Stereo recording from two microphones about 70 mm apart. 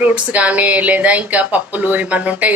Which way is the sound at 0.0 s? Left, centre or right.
Centre.